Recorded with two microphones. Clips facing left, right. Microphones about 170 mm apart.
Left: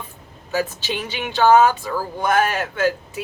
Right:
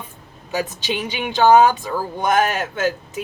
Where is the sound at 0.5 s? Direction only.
15° right (ahead or behind).